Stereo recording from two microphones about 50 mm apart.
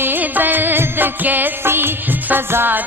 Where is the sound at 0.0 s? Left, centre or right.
Right.